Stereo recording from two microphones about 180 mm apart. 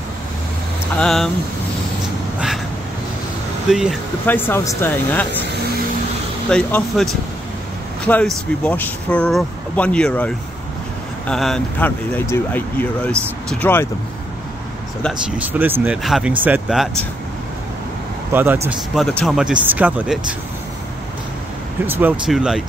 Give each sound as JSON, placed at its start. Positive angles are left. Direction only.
{"t": 0.9, "sound": "speech", "side_deg": 5}
{"t": 3.7, "sound": "speech", "side_deg": 0}
{"t": 4.3, "sound": "speech", "side_deg": 10}
{"t": 6.5, "sound": "speech", "side_deg": 5}
{"t": 8.1, "sound": "speech", "side_deg": 10}
{"t": 15.3, "sound": "speech", "side_deg": -10}
{"t": 18.3, "sound": "speech", "side_deg": -10}
{"t": 18.7, "sound": "speech", "side_deg": 0}
{"t": 21.8, "sound": "speech", "side_deg": -10}